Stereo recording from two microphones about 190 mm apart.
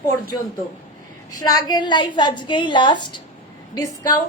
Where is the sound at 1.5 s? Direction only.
20° left (ahead or behind).